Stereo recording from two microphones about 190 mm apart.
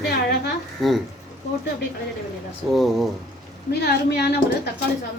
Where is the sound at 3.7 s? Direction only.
60° left (ahead or behind).